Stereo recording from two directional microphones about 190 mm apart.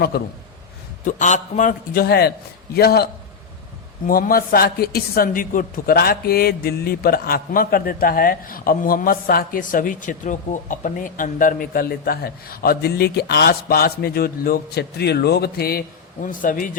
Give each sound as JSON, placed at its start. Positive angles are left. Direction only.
{"t": 0.1, "sound": "a man's voice", "side_deg": 55}
{"t": 1.0, "sound": "a man's voice", "side_deg": 40}
{"t": 16.2, "sound": "a man's voice", "side_deg": 45}